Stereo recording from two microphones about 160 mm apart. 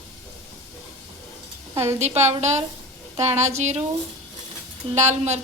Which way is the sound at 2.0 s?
45° right (ahead or behind).